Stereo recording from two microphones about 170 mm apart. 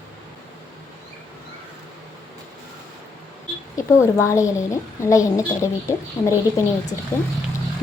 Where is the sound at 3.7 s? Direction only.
15° left (ahead or behind).